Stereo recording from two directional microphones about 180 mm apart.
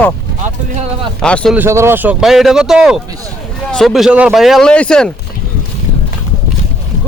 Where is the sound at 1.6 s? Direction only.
15° right (ahead or behind); by 5.1 s 5° left (ahead or behind).